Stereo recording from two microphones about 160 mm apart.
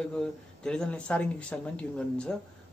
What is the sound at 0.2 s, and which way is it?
Speech, 5° left (ahead or behind).